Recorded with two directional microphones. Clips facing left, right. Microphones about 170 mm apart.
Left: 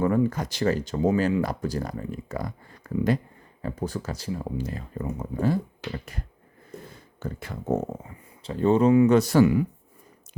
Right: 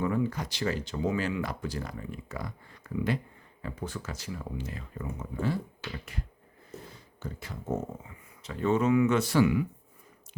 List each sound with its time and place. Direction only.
0.0 s speech: 45° left (ahead or behind)
5.9 s finger snapping: 45° left (ahead or behind)
6.7 s a sound: 55° left (ahead or behind)
8.4 s speech: 30° left (ahead or behind)